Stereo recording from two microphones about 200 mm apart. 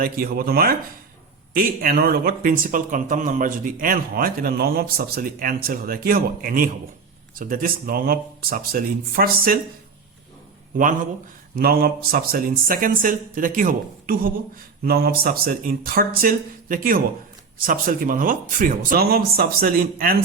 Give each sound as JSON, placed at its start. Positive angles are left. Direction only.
{"t": 0.0, "sound": "speech", "side_deg": -45}
{"t": 11.5, "sound": "speech", "side_deg": -50}